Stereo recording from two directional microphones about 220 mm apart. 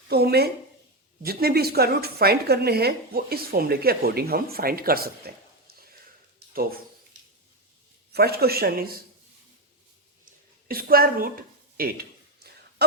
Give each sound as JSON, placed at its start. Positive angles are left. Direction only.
{"t": 0.1, "sound": "a woman's voice", "side_deg": -45}
{"t": 8.1, "sound": "a woman's voice", "side_deg": -45}
{"t": 10.7, "sound": "speech", "side_deg": -40}